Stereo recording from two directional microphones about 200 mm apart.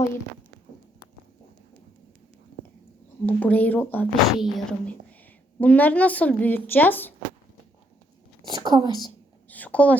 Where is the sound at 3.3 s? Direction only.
10° left (ahead or behind).